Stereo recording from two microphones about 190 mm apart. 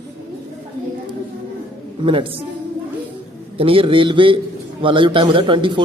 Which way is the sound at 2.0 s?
30° right (ahead or behind).